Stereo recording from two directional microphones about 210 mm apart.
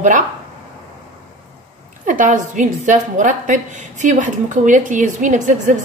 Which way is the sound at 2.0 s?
40° right (ahead or behind).